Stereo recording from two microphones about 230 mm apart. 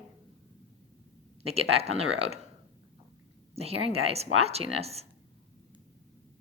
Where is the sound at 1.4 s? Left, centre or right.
Right.